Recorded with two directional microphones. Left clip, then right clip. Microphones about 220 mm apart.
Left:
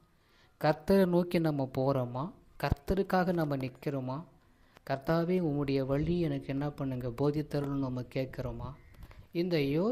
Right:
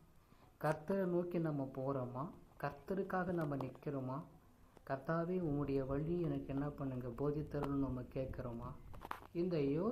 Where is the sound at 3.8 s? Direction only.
35° left (ahead or behind).